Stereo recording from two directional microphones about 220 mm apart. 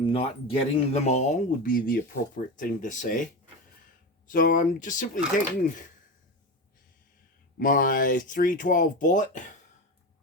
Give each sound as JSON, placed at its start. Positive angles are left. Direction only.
{"t": 0.0, "sound": "speech", "side_deg": 25}
{"t": 4.3, "sound": "speech", "side_deg": 40}
{"t": 7.6, "sound": "speech", "side_deg": 40}